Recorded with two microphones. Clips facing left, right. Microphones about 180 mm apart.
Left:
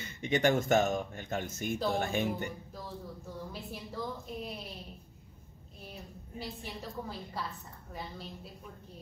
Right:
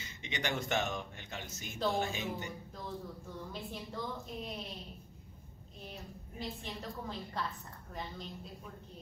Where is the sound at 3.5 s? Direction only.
5° left (ahead or behind).